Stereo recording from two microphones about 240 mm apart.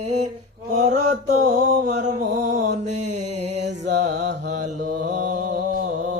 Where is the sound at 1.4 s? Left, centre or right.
Right.